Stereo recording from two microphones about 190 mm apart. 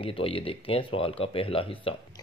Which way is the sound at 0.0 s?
30° left (ahead or behind).